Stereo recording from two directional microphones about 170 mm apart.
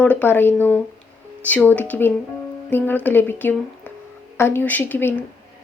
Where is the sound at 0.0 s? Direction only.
10° left (ahead or behind).